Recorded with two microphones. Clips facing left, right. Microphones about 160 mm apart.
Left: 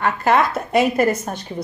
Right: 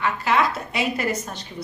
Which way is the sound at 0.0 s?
50° left (ahead or behind).